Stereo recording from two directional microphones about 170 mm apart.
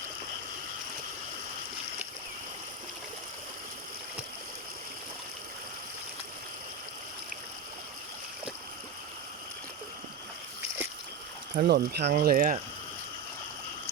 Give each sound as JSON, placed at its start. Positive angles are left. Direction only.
{"t": 11.5, "sound": "speech", "side_deg": -65}